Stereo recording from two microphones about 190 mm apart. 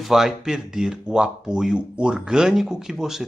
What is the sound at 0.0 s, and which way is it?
Speech, centre (ahead or behind).